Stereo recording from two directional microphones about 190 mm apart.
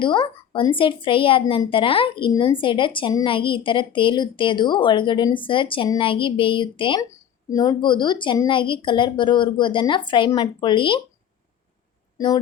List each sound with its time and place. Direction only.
0.0 s speech: 25° left (ahead or behind)
12.1 s speech: 20° left (ahead or behind)